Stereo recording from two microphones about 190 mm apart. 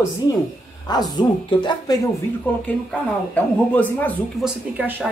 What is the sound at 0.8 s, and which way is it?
Speech, 20° left (ahead or behind).